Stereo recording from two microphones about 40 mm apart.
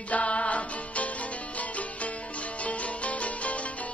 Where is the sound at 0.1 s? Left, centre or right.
Left.